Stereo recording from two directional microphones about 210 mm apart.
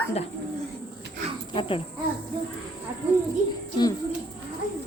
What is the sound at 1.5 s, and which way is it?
Speech, 25° left (ahead or behind).